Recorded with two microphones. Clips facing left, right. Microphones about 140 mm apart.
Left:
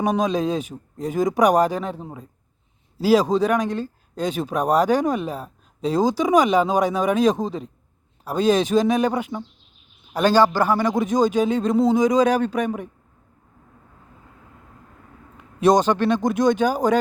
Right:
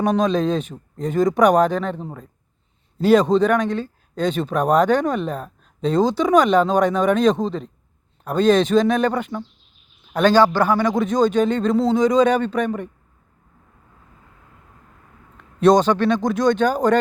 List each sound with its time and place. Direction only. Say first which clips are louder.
0.0 s speech: right 2 dB; 5° left (ahead or behind)
15.6 s speech: right 2 dB; 10° left (ahead or behind)